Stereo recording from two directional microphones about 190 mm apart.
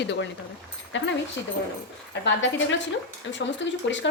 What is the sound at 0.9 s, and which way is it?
Speech, 75° left (ahead or behind).